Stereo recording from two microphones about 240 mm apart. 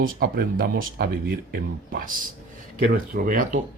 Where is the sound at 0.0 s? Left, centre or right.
Right.